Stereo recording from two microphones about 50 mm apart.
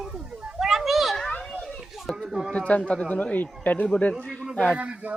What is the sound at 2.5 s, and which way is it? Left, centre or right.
A man's voice, left.